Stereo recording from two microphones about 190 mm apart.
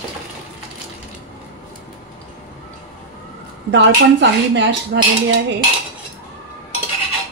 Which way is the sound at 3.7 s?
70° right (ahead or behind).